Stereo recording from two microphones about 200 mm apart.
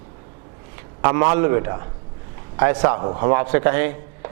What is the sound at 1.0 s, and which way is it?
A man's voice, 20° right (ahead or behind).